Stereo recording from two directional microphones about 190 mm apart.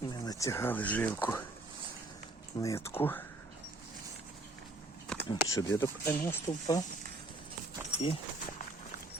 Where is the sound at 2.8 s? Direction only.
10° left (ahead or behind).